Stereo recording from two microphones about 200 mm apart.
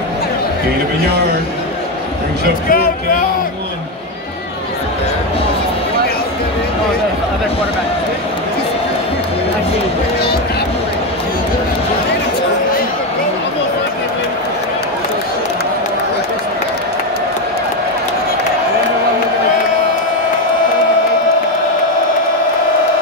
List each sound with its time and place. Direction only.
2.7 s speech: 45° left (ahead or behind)